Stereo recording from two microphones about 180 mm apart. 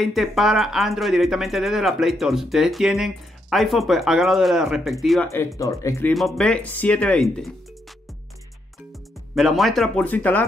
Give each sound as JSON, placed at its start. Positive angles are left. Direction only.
{"t": 0.0, "sound": "speech", "side_deg": 0}
{"t": 5.6, "sound": "speech", "side_deg": 15}
{"t": 6.1, "sound": "speech", "side_deg": 0}
{"t": 9.3, "sound": "speech", "side_deg": 0}